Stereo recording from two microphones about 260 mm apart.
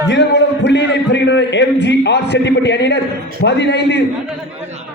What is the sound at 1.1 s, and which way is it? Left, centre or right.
A man's voice, left.